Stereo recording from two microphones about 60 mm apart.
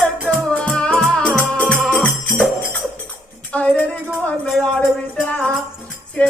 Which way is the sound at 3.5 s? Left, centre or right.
Left.